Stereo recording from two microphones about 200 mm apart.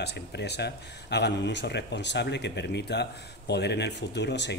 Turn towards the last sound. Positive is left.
turn(degrees=60)  # may be behind; listen again after turning